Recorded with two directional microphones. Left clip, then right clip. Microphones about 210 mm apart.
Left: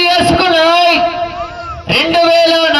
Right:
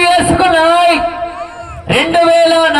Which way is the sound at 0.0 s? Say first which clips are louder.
Right 1 dB; 50° left (ahead or behind).